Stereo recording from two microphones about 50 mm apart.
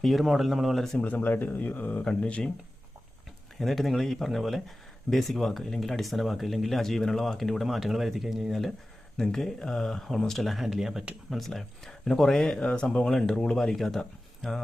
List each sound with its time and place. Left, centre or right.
0.0 s speech: centre
0.9 s speech: left
2.0 s speech: left
3.6 s speech: centre
9.1 s speech: centre
12.6 s speech: left